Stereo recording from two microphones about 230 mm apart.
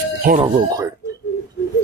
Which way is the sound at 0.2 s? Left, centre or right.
Right.